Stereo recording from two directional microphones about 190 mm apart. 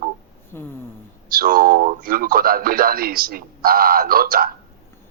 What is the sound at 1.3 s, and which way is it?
Speech, 50° right (ahead or behind).